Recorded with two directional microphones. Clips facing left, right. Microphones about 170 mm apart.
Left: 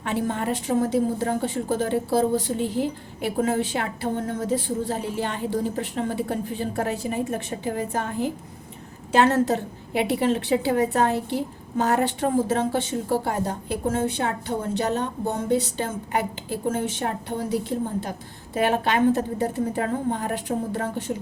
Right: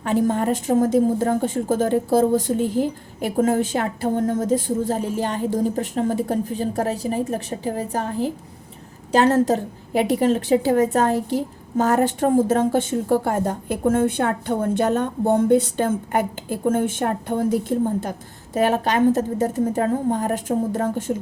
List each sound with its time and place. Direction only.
0.0 s a woman's voice: 40° right (ahead or behind)